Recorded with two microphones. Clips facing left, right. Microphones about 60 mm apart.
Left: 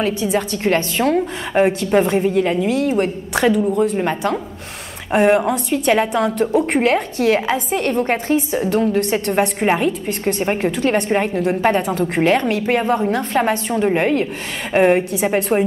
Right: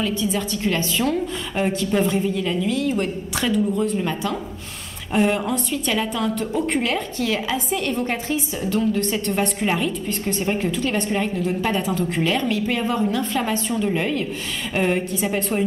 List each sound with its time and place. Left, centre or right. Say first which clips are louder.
0.0 s a woman's voice: left 4 dB; left
3.5 s a woman's voice: left 4 dB; left
3.9 s a woman's voice: left 5 dB; left